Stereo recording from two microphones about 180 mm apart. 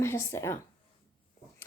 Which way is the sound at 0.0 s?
15° left (ahead or behind).